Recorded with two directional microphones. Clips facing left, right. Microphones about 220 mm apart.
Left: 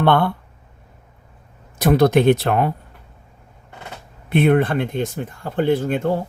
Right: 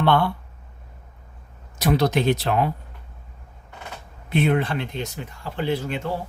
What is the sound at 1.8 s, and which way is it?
Speech, 55° left (ahead or behind).